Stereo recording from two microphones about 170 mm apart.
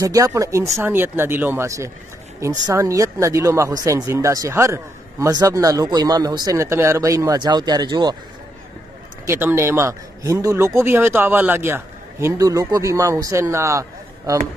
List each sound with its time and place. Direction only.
0.0 s speech: 20° right (ahead or behind)
9.2 s speech: 15° right (ahead or behind)